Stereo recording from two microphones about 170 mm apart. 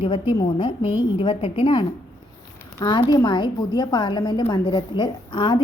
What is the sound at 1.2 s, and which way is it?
A woman's voice, 30° left (ahead or behind).